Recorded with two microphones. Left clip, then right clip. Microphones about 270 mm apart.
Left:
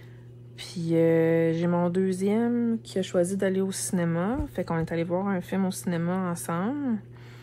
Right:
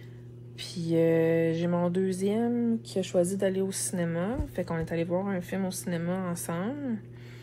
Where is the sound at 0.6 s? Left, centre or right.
Centre.